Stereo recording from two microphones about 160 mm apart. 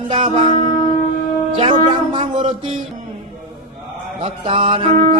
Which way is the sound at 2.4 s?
30° right (ahead or behind).